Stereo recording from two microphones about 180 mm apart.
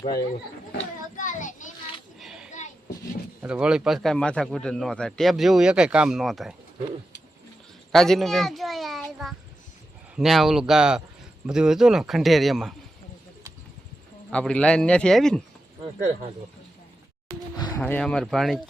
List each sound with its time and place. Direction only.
1.1 s child singing: 45° left (ahead or behind)
2.1 s a sound: centre (ahead or behind)
3.4 s a man's voice: 5° right (ahead or behind)
7.9 s a sound: centre (ahead or behind)
10.2 s a man's voice: centre (ahead or behind)
14.3 s a man's voice: 5° left (ahead or behind)
17.7 s a man's voice: 10° left (ahead or behind)